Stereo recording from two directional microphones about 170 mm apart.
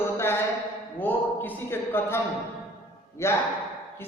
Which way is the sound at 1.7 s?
15° left (ahead or behind).